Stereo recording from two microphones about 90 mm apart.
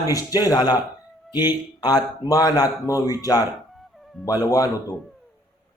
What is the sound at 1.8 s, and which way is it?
Speech, 45° left (ahead or behind).